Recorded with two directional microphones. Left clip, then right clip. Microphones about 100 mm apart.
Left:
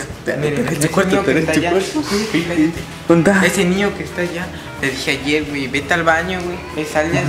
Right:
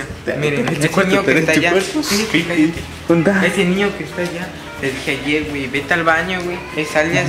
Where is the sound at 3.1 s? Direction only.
25° left (ahead or behind); by 7.2 s centre (ahead or behind).